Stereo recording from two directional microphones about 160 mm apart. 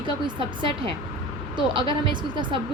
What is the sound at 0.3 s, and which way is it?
A woman's voice, 30° right (ahead or behind).